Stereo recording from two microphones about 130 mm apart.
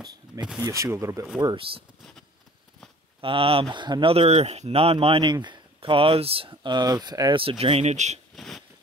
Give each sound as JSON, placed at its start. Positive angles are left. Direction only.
{"t": 0.6, "sound": "speech", "side_deg": -25}
{"t": 3.2, "sound": "speech", "side_deg": -45}
{"t": 7.9, "sound": "speech", "side_deg": -65}
{"t": 8.4, "sound": "a sound", "side_deg": 5}